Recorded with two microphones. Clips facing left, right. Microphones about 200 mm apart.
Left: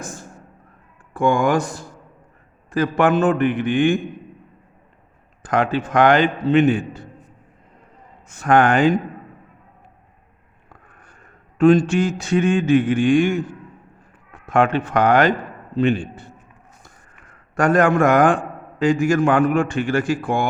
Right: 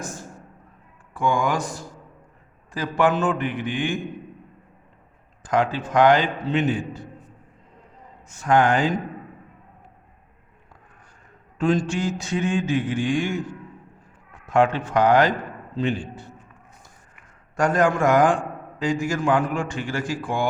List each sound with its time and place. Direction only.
1.1 s a man's voice: 55° left (ahead or behind)
5.4 s a man's voice: 60° left (ahead or behind)
8.3 s a man's voice: 60° left (ahead or behind)
11.5 s a man's voice: 60° left (ahead or behind)
17.6 s a man's voice: 60° left (ahead or behind)